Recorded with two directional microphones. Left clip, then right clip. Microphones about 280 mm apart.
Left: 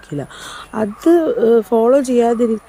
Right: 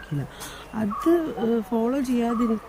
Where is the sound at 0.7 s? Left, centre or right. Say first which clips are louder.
Left 9 dB; centre.